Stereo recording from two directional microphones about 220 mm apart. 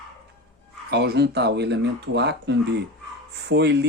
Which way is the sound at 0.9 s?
50° right (ahead or behind).